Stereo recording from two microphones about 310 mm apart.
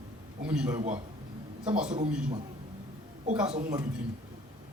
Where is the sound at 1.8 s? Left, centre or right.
Right.